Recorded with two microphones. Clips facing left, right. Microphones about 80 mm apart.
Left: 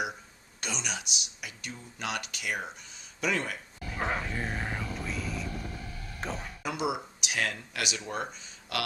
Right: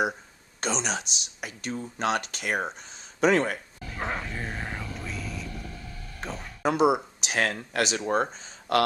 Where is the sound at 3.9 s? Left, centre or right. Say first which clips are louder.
Even; centre.